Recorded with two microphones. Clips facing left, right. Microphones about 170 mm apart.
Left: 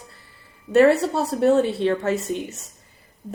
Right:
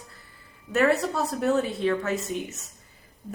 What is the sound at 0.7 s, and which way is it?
A woman's voice, 30° left (ahead or behind).